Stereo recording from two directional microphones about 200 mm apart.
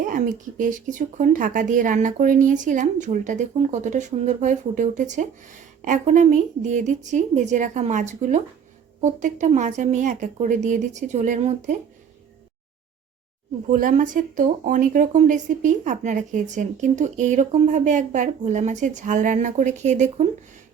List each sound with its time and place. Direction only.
0.0 s speech: 40° right (ahead or behind)
13.7 s speech: 40° right (ahead or behind)